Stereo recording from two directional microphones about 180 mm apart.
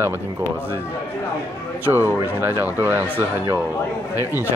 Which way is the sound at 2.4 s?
10° right (ahead or behind).